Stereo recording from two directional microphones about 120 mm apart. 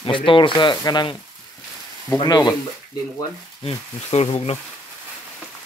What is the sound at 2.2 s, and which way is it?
Speech, 35° left (ahead or behind).